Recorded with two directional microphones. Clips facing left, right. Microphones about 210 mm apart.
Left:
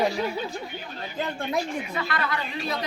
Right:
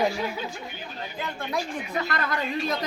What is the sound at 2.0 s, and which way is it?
Speech, 45° right (ahead or behind).